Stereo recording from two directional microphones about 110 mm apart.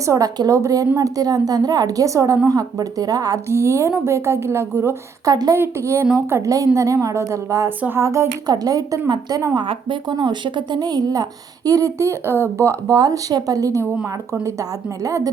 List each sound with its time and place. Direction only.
0.0 s a woman's voice: 30° right (ahead or behind)
9.6 s speech: 45° right (ahead or behind); by 13.8 s 30° right (ahead or behind)
15.0 s speech: 35° right (ahead or behind)